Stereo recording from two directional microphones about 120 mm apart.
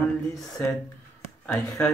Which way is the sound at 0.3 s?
30° left (ahead or behind).